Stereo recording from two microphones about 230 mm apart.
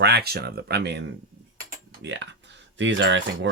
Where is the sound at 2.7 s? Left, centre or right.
Right.